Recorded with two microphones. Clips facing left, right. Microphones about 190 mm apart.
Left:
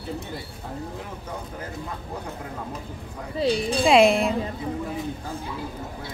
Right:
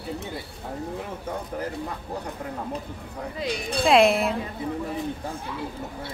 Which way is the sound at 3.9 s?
Centre (ahead or behind).